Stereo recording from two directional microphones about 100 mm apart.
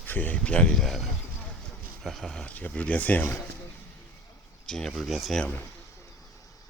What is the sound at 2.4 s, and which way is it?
Speech, 15° left (ahead or behind).